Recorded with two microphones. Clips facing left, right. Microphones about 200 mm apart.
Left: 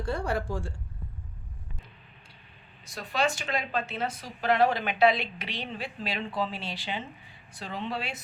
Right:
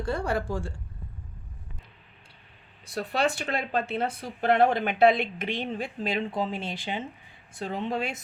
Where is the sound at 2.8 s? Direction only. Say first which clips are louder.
Right 2 dB; 60° right (ahead or behind).